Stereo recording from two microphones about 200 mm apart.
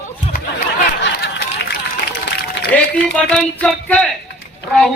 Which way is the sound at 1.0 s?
60° left (ahead or behind).